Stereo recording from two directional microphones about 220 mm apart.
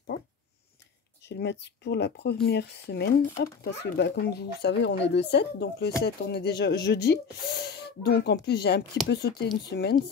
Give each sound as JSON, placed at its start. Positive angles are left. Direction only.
{"t": 1.3, "sound": "speech", "side_deg": 50}